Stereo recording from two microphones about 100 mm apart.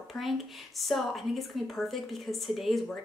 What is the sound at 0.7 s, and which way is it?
Speech, centre (ahead or behind).